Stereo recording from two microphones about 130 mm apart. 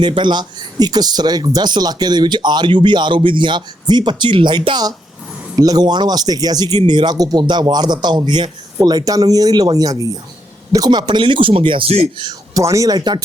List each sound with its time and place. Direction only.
0.0 s speech: 35° right (ahead or behind)
12.2 s speech: 30° right (ahead or behind)